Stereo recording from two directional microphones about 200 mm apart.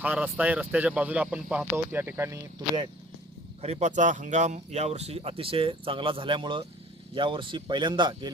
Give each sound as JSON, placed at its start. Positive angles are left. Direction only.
{"t": 0.0, "sound": "speech", "side_deg": -10}
{"t": 3.6, "sound": "speech", "side_deg": -35}